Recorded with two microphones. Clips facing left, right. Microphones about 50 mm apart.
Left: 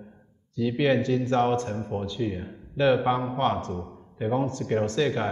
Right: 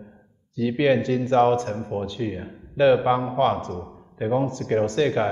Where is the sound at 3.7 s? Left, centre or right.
Centre.